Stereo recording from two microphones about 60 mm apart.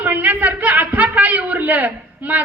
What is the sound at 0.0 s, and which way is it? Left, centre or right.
Speech, right.